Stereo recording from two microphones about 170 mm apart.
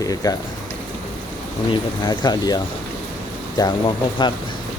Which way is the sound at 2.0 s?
25° left (ahead or behind).